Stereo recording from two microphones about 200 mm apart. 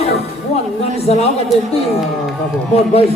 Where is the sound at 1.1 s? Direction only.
30° left (ahead or behind).